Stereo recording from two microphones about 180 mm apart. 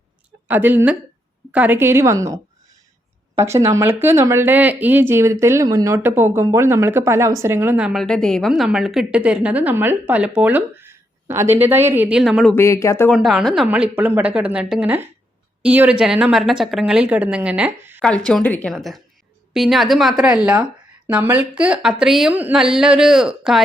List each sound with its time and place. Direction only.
0.4 s speech: 10° right (ahead or behind)
12.5 s speech: 15° left (ahead or behind)
13.1 s speech: centre (ahead or behind)
18.3 s speech: 5° left (ahead or behind)